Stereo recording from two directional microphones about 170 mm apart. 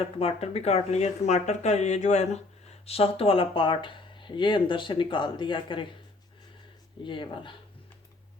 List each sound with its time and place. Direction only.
0.2 s speech: 35° left (ahead or behind)
7.0 s speech: 30° left (ahead or behind)